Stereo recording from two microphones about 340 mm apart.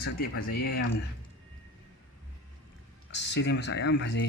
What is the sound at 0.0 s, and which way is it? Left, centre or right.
Speech, left.